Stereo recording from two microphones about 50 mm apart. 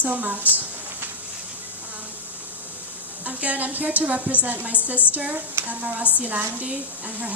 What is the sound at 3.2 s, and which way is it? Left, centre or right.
A woman's voice, right.